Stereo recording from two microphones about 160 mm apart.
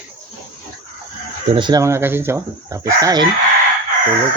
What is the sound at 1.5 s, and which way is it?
Speech, 25° right (ahead or behind).